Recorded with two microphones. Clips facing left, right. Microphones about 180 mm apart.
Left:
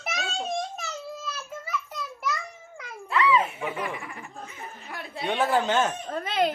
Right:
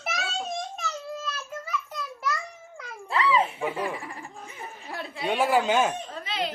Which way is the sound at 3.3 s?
30° right (ahead or behind).